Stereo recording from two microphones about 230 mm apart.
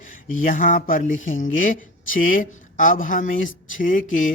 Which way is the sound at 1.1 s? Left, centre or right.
Left.